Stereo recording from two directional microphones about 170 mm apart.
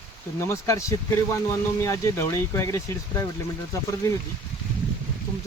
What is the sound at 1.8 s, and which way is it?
Speech, 15° left (ahead or behind).